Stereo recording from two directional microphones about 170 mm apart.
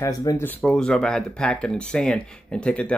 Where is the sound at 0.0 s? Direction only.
20° left (ahead or behind).